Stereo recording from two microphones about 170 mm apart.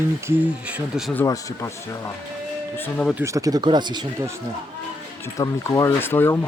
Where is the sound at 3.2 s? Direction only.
20° right (ahead or behind).